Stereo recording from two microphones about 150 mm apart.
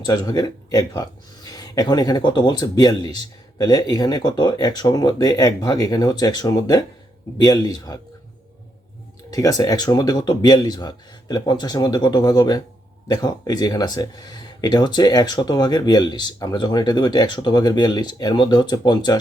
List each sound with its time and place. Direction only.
0.0 s speech: 25° left (ahead or behind)
9.3 s speech: 25° left (ahead or behind)